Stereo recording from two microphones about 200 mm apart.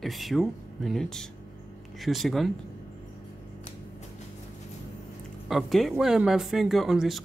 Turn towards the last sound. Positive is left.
turn(degrees=0)  # may be behind; listen again after turning